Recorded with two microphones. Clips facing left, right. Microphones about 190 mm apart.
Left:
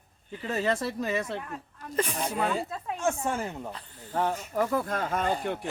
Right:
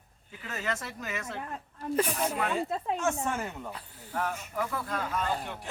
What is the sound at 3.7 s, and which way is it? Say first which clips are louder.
Speech: left 1 dB; 5° right (ahead or behind).